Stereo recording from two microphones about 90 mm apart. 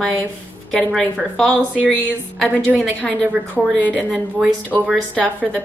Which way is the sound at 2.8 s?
15° left (ahead or behind).